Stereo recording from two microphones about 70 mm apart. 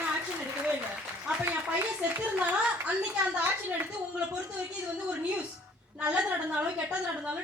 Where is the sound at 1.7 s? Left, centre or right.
Right.